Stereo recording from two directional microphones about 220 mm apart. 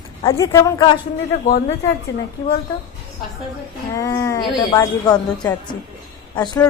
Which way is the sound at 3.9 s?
15° left (ahead or behind).